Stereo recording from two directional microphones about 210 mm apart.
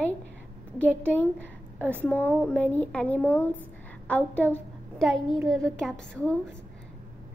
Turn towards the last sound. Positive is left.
turn(degrees=5)  # may be behind; listen again after turning